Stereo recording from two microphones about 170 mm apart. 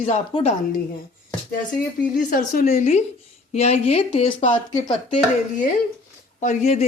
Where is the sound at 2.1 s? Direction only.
50° left (ahead or behind); by 4.6 s 30° left (ahead or behind).